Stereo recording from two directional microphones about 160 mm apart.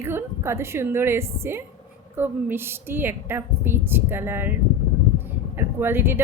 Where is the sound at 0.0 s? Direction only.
15° right (ahead or behind).